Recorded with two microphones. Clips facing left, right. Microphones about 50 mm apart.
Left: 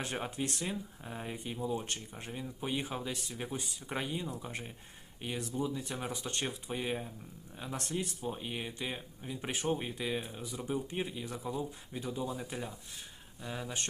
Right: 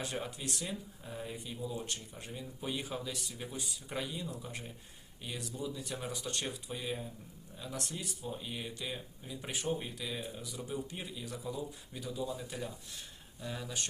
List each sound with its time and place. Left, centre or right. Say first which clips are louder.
0.0 s speech: left 3 dB; left